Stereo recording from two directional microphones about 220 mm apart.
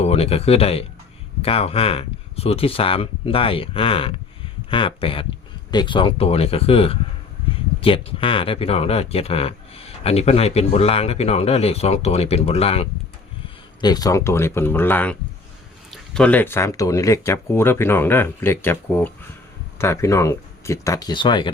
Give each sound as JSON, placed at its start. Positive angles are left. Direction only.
{"t": 0.0, "sound": "speech", "side_deg": 30}